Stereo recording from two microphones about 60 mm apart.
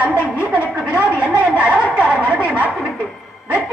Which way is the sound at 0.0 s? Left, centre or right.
Right.